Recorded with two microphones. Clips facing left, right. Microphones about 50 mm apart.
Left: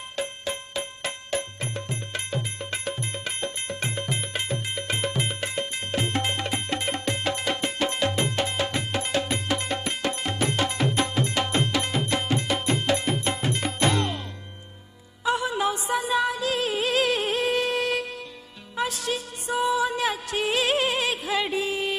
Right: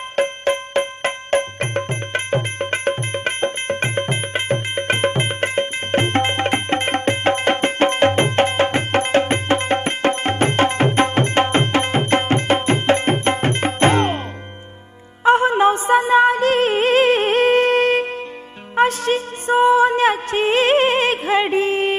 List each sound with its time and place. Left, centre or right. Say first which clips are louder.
0.1 s music: right 13 dB; right
15.2 s music: right 11 dB; right